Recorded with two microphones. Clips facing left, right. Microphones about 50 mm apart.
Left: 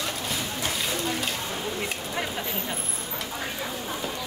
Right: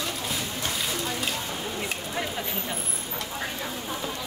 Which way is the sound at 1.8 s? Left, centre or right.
Centre.